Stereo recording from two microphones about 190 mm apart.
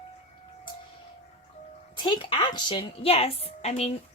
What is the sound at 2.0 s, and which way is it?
A woman's voice, 25° left (ahead or behind).